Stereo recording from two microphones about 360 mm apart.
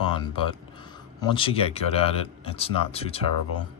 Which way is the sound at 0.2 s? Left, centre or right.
Centre.